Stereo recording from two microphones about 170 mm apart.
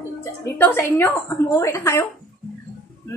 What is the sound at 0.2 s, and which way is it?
A woman's voice, 10° left (ahead or behind).